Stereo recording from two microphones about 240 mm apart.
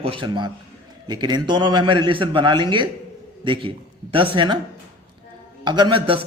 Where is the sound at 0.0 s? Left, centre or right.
Right.